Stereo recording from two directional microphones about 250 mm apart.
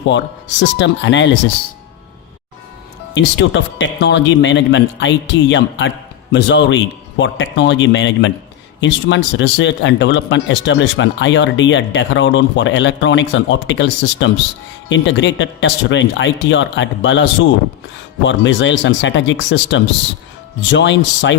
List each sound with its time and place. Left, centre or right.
0.1 s speech: left
3.2 s speech: left